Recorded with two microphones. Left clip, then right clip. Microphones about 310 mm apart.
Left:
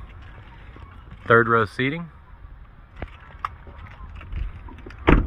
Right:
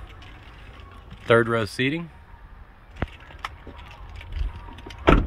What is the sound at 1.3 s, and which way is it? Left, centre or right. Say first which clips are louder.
Speech: left 3 dB; centre.